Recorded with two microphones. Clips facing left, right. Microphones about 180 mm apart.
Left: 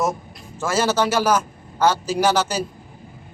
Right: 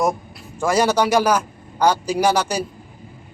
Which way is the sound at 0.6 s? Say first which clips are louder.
Right 3 dB; 15° right (ahead or behind).